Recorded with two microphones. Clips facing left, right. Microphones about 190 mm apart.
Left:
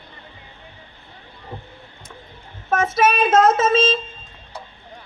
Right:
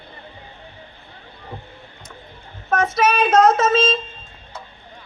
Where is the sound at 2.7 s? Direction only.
25° left (ahead or behind).